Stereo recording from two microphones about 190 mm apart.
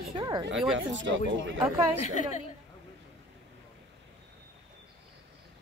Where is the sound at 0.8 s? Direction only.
70° right (ahead or behind).